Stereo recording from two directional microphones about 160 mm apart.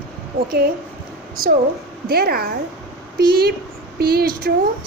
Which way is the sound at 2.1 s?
75° right (ahead or behind).